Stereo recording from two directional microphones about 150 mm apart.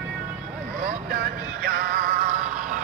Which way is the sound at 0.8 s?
70° right (ahead or behind).